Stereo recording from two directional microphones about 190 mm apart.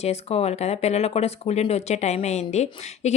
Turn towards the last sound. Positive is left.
turn(degrees=35)  # may be behind; listen again after turning